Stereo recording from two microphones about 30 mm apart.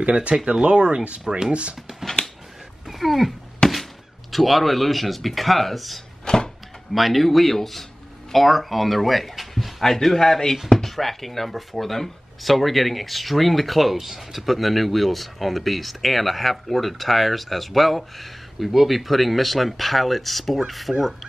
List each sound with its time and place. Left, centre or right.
0.0 s speech: right
2.9 s speech: centre
3.6 s thunk: left
4.3 s speech: centre
6.2 s a sound: left
6.9 s speech: centre
9.8 s a man's voice: centre